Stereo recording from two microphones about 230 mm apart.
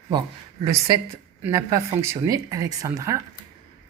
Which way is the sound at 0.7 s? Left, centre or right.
Centre.